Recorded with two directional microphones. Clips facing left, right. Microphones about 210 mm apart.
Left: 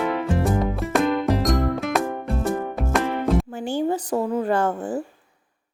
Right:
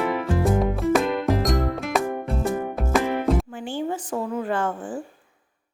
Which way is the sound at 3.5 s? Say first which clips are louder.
Left 4 dB; 40° left (ahead or behind).